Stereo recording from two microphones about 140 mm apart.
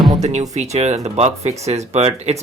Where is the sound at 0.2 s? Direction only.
55° right (ahead or behind).